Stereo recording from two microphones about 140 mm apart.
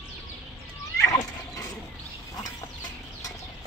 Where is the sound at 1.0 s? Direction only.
25° left (ahead or behind).